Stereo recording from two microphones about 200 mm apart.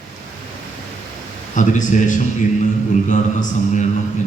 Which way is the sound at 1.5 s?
40° left (ahead or behind).